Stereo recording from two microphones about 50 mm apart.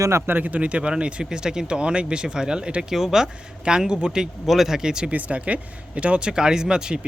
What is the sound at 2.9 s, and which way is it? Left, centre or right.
Speech, centre.